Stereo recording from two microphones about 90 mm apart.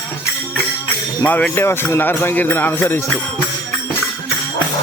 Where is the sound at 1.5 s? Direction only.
30° left (ahead or behind).